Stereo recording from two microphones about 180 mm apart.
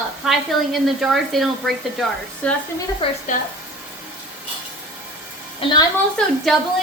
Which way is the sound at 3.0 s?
30° left (ahead or behind).